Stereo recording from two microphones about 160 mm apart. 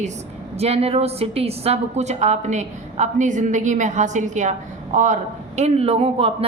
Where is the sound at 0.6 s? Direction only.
40° right (ahead or behind).